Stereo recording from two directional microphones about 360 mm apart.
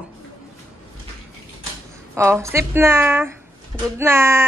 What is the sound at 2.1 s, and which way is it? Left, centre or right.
A woman's voice, centre.